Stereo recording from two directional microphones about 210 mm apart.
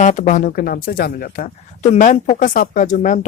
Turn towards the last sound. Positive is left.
turn(degrees=35)  # may be behind; listen again after turning